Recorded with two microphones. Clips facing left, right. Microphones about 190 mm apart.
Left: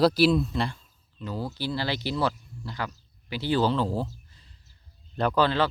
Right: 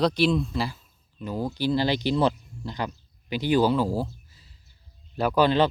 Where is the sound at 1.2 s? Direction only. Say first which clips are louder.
Right 5 dB; 15° right (ahead or behind).